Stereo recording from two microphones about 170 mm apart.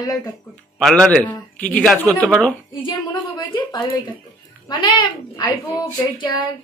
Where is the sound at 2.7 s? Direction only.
30° left (ahead or behind).